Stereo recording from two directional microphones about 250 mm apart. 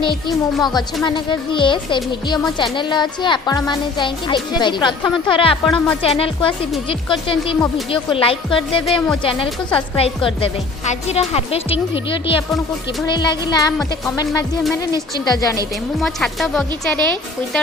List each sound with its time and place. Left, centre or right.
0.6 s a woman's voice: centre
13.1 s a woman's voice: centre
15.2 s a woman's voice: centre
16.0 s speech: centre